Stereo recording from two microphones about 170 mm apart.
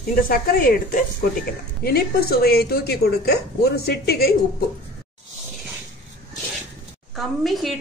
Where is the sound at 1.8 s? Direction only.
65° left (ahead or behind).